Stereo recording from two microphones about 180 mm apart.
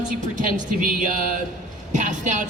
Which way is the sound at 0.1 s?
45° right (ahead or behind).